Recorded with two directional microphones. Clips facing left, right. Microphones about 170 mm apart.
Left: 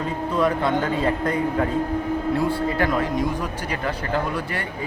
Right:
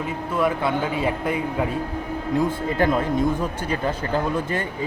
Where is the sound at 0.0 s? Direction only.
5° right (ahead or behind).